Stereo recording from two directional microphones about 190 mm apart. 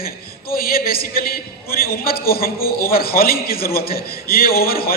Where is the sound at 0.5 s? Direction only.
50° left (ahead or behind).